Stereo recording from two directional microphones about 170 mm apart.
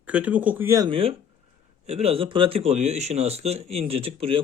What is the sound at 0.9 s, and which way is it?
Speech, 35° right (ahead or behind).